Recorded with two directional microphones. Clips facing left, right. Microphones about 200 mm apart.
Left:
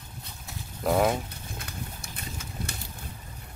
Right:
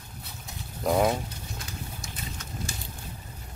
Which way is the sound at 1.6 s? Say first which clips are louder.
Left 2 dB; 60° left (ahead or behind).